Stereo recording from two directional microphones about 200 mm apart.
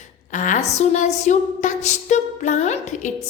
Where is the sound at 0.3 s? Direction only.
40° left (ahead or behind).